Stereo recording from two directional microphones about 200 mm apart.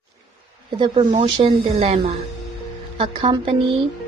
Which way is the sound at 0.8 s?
25° right (ahead or behind).